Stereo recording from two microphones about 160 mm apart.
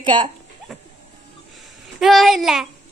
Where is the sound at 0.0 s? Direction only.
30° right (ahead or behind).